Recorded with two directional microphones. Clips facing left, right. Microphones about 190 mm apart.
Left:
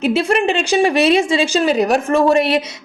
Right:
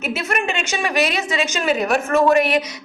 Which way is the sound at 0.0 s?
30° left (ahead or behind).